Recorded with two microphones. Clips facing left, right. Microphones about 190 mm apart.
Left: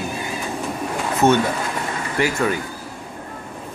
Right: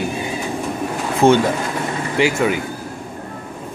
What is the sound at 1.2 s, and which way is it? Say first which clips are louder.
Speech: right 3 dB; 30° right (ahead or behind).